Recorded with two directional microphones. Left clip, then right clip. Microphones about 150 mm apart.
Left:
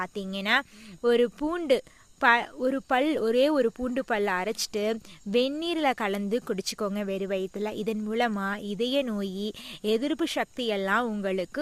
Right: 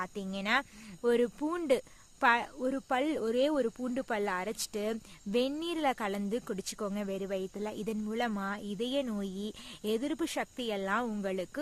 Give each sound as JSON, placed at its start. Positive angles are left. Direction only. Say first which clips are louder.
{"t": 0.0, "sound": "speech", "louder": "left 5 dB", "side_deg": 30}